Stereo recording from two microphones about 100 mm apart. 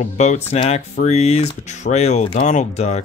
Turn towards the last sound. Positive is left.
turn(degrees=90)